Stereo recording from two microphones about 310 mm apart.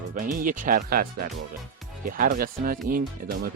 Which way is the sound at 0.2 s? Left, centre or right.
Right.